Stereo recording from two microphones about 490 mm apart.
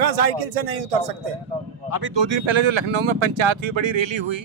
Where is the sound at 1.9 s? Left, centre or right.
Right.